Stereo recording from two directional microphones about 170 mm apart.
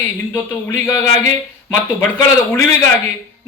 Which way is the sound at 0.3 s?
15° left (ahead or behind).